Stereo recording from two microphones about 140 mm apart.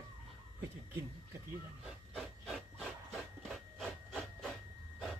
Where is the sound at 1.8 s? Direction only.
Centre (ahead or behind).